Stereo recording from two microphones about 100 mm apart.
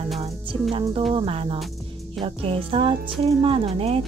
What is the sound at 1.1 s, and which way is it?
Speech, 70° right (ahead or behind).